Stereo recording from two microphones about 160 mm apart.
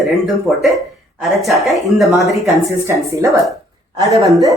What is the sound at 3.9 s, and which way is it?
Speech, 20° right (ahead or behind).